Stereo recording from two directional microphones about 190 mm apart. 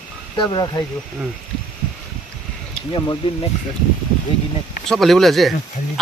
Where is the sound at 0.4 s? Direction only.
25° left (ahead or behind).